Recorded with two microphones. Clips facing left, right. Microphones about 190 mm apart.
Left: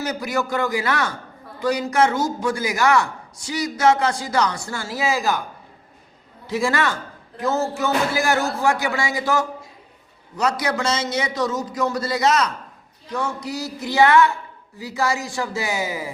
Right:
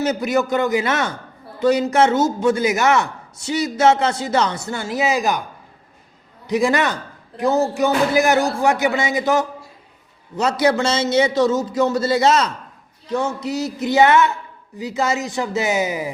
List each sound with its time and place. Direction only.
0.0 s a man's voice: 25° right (ahead or behind)
6.5 s a man's voice: 20° right (ahead or behind)